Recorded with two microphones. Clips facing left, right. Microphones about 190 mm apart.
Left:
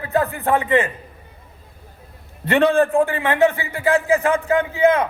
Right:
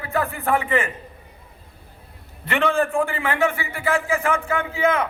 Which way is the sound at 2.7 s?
20° left (ahead or behind).